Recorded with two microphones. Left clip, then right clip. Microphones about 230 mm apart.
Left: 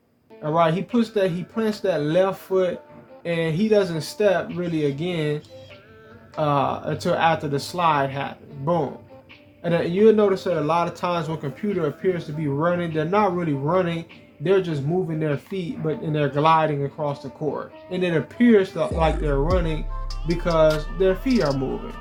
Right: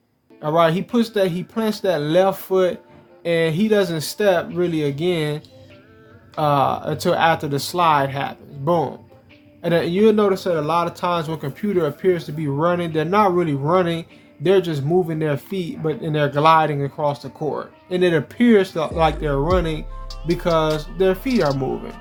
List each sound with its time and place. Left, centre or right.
0.4 s speech: right
20.1 s music: centre
21.0 s speech: right
21.2 s speech: centre